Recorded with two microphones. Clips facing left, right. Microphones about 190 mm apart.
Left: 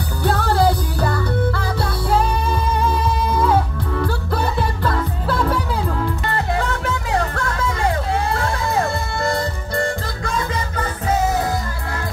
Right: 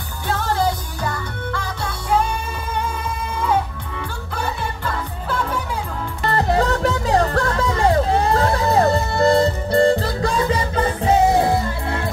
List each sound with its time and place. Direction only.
0.2 s music: 35° left (ahead or behind)
6.2 s music: 35° right (ahead or behind)